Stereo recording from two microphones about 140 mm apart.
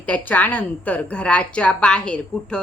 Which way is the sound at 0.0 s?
10° left (ahead or behind).